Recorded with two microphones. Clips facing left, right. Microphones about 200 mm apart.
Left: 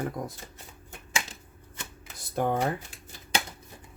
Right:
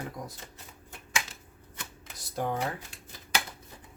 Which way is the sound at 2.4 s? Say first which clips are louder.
Left 4 dB; 55° left (ahead or behind).